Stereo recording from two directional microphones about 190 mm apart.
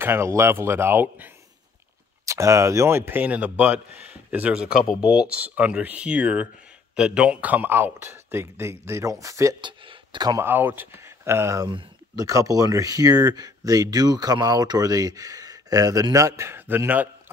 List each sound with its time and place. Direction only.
0.0 s speech: 15° right (ahead or behind)